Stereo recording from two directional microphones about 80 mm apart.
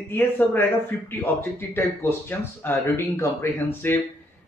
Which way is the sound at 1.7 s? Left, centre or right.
Left.